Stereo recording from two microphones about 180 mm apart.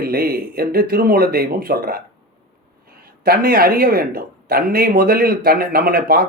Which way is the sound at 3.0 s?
55° right (ahead or behind).